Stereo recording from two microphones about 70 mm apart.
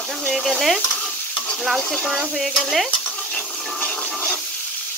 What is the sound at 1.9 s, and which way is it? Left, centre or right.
Stir, centre.